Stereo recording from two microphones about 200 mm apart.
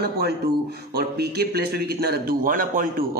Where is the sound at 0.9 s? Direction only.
50° right (ahead or behind).